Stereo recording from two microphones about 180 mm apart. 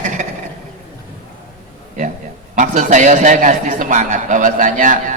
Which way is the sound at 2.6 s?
45° right (ahead or behind).